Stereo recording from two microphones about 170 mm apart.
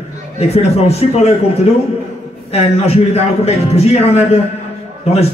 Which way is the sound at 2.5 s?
35° left (ahead or behind).